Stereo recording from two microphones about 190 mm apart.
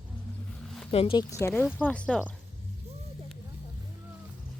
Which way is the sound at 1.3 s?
15° left (ahead or behind).